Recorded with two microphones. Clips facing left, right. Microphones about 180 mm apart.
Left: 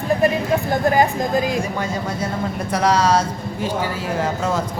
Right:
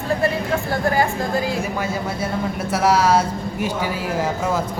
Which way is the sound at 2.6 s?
5° right (ahead or behind).